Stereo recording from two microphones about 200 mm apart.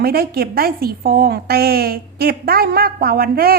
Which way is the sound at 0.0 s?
50° right (ahead or behind).